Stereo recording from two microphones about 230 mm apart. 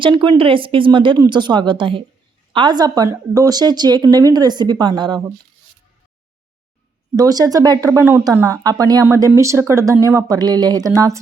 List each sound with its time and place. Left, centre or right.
0.0 s speech: right
7.2 s speech: centre